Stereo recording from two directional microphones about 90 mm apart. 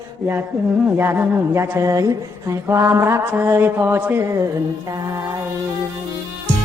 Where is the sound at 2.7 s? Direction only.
30° right (ahead or behind).